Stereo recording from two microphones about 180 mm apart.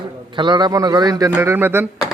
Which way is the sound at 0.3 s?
25° right (ahead or behind).